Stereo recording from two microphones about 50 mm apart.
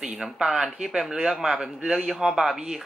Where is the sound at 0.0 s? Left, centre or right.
Centre.